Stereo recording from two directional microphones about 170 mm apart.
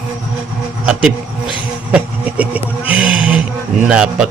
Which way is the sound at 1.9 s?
10° right (ahead or behind).